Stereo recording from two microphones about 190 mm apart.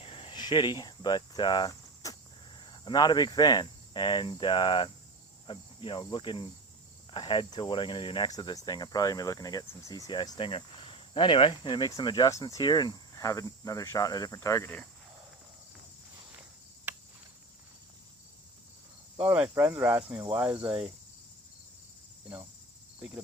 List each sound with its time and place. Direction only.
0.0 s speech: 30° left (ahead or behind)
2.6 s cricket: 25° left (ahead or behind)
5.5 s speech: 25° left (ahead or behind)
19.2 s speech: 10° right (ahead or behind)
23.0 s speech: 5° right (ahead or behind)